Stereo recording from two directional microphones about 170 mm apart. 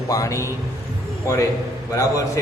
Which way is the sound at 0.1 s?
20° left (ahead or behind).